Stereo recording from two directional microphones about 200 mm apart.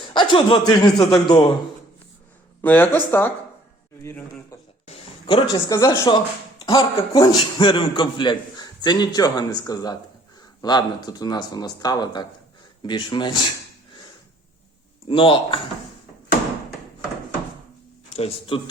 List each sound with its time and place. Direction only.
0.0 s a man's voice: 25° left (ahead or behind)
2.6 s speech: 10° left (ahead or behind)
4.9 s a sound: 25° left (ahead or behind)
5.5 s a man's voice: 15° left (ahead or behind)
15.0 s a man's voice: 25° left (ahead or behind)
18.1 s a man's voice: 30° left (ahead or behind)